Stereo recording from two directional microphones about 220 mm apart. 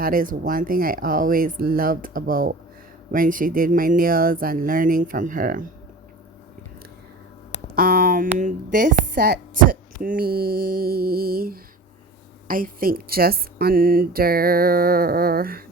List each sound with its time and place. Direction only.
0.0 s speech: 40° right (ahead or behind)
7.8 s speech: 40° right (ahead or behind)